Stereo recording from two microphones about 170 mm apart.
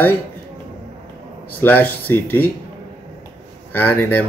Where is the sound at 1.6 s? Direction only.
10° left (ahead or behind).